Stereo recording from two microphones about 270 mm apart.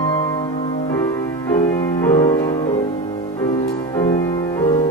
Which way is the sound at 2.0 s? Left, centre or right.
Centre.